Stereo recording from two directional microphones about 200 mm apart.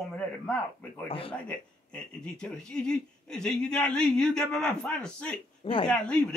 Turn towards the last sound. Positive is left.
turn(degrees=5)  # may be behind; listen again after turning